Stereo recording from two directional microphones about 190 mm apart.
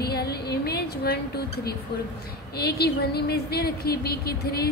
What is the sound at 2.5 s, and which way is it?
A woman's voice, 55° left (ahead or behind).